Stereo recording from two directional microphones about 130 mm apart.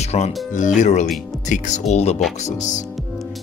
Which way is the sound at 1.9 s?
55° left (ahead or behind).